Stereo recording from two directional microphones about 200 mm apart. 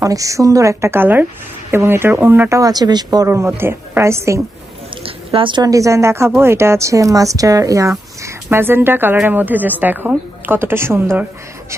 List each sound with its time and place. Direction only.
0.0 s speech: 15° right (ahead or behind)
5.0 s a woman's voice: 25° right (ahead or behind)